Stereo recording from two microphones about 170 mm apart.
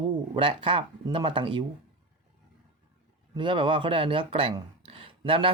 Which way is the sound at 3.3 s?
30° right (ahead or behind).